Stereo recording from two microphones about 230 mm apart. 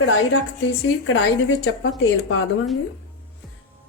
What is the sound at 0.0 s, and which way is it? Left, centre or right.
A woman's voice, left.